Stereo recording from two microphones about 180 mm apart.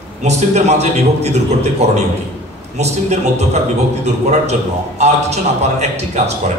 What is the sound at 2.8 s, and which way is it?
A man's voice, 40° right (ahead or behind).